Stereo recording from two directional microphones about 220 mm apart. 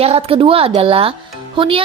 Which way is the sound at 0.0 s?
25° right (ahead or behind).